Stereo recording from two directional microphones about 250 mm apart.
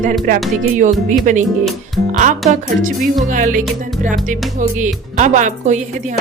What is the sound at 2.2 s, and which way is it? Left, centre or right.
Music, right.